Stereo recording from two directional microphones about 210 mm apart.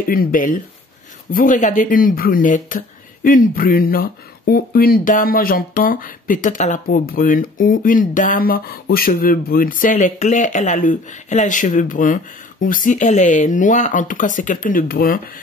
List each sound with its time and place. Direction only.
0.1 s speech: 40° left (ahead or behind)